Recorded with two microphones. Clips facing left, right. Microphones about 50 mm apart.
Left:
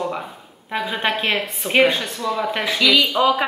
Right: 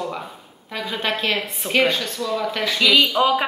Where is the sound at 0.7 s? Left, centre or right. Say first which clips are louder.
Left 3 dB; left.